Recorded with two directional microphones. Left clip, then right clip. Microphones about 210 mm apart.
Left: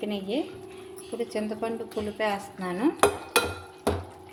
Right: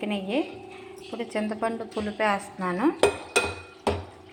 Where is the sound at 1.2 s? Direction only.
5° left (ahead or behind).